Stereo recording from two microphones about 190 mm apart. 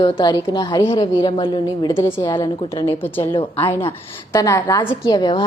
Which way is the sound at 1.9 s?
10° left (ahead or behind).